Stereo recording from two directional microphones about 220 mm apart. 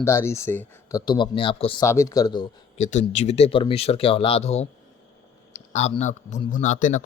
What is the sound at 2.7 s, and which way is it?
Speech, 30° left (ahead or behind).